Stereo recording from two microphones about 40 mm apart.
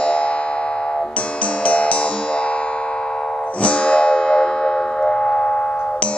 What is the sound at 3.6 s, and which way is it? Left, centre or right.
Music, left.